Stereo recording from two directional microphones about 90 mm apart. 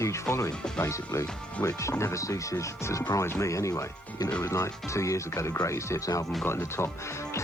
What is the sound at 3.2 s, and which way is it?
Speech, 35° left (ahead or behind).